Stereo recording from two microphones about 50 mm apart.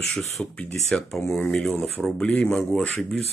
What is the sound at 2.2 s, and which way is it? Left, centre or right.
Speech, centre.